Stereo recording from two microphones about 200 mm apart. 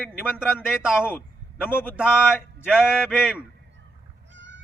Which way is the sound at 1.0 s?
10° left (ahead or behind).